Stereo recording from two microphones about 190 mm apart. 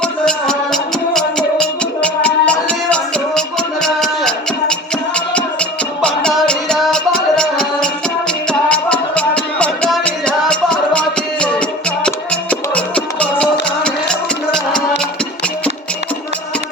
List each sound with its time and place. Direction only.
0.0 s music: 5° left (ahead or behind)